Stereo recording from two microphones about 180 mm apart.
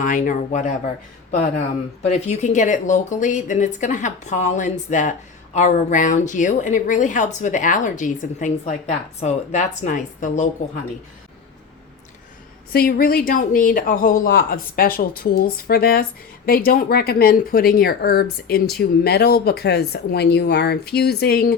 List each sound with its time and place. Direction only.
0.0 s speech: 45° left (ahead or behind)
2.0 s speech: 40° left (ahead or behind)
12.7 s speech: 55° left (ahead or behind)